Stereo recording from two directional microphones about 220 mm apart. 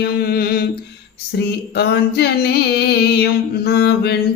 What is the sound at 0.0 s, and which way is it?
Mantra, 45° left (ahead or behind).